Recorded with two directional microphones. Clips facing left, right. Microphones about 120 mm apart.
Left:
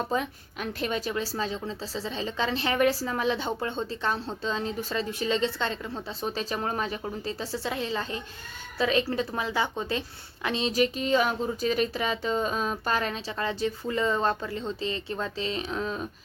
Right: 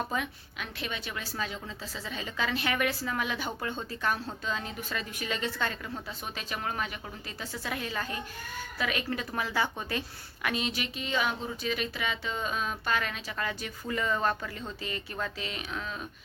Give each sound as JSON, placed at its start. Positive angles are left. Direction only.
{"t": 0.1, "sound": "a woman's voice", "side_deg": 35}